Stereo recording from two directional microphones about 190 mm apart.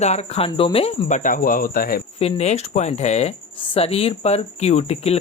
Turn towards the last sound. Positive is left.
turn(degrees=35)  # may be behind; listen again after turning